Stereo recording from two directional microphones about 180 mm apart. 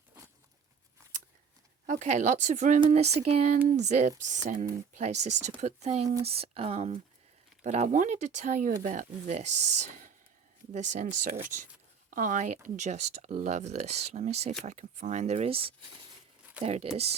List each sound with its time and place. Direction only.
1.9 s speech: 40° right (ahead or behind)